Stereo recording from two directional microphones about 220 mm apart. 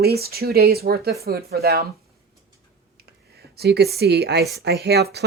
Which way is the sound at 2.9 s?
45° right (ahead or behind).